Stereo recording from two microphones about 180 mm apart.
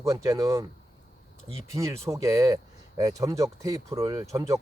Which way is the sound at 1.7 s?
15° right (ahead or behind).